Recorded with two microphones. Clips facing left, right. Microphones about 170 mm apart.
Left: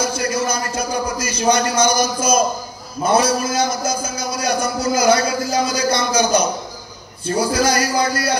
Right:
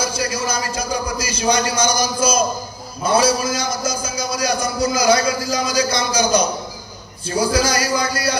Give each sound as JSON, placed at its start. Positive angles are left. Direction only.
{"t": 0.3, "sound": "a man's voice", "side_deg": 55}